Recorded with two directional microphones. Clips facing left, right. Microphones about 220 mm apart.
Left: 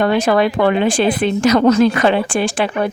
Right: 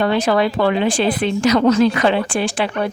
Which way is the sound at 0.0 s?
50° left (ahead or behind).